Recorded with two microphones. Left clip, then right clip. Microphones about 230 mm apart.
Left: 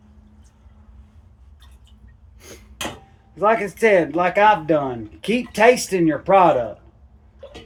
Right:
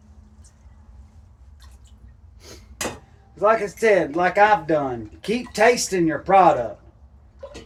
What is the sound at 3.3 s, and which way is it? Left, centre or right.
Speech, left.